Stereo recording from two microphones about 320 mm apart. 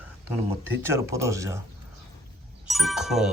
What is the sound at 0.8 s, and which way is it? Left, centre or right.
Speech, centre.